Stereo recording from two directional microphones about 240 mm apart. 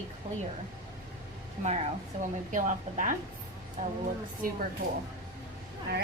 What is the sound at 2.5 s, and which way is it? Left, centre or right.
Speech, right.